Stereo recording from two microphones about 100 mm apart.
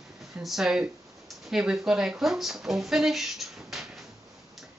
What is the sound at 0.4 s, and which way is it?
Speech, 5° right (ahead or behind).